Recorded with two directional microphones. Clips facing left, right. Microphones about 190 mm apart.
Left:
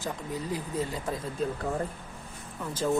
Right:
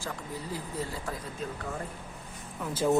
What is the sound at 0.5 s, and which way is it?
Speech, 20° left (ahead or behind).